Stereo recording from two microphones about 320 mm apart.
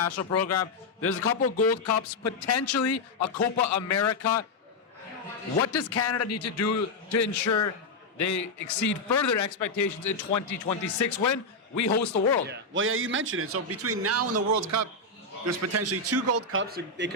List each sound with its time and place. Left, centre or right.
0.0 s a man's voice: left
5.5 s a man's voice: left
12.5 s a man's voice: right